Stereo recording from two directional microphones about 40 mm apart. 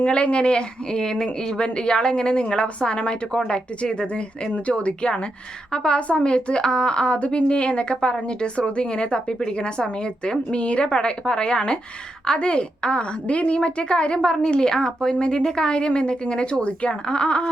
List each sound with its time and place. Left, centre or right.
0.0 s a woman's voice: left